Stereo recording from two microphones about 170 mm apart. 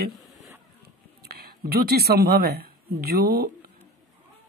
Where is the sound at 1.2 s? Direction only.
65° right (ahead or behind).